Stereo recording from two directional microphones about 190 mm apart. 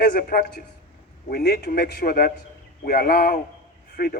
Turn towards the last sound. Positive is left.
turn(degrees=55)  # may be behind; listen again after turning